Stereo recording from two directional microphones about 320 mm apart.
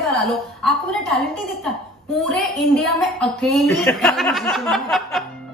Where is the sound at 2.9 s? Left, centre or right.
Centre.